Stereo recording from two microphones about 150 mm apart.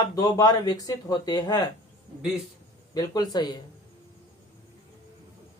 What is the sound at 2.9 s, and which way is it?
Speech, 25° left (ahead or behind).